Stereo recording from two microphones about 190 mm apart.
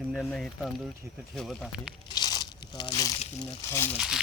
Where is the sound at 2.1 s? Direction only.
20° left (ahead or behind).